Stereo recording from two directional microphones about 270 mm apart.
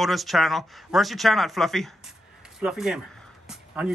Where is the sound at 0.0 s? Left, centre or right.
Centre.